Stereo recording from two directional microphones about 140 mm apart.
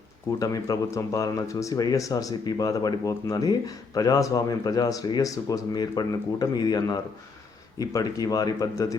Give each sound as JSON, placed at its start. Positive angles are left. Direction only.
{"t": 0.3, "sound": "speech", "side_deg": 25}